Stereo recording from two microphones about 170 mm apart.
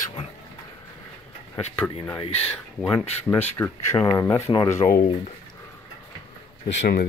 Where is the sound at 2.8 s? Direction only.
10° left (ahead or behind).